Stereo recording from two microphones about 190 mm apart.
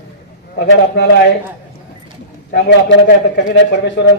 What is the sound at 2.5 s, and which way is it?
A man's voice, 60° left (ahead or behind).